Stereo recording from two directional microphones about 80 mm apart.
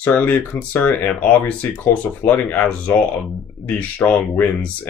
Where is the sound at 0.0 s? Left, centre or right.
Centre.